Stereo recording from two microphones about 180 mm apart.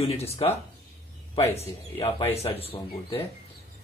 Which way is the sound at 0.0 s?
35° left (ahead or behind).